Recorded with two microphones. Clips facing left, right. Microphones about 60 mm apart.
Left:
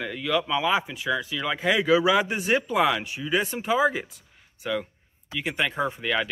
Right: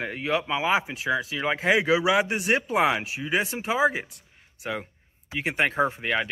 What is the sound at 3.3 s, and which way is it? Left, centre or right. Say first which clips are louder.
Speech: left 2 dB; centre.